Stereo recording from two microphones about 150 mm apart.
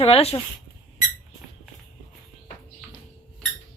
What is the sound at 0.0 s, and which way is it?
Speech, 40° left (ahead or behind).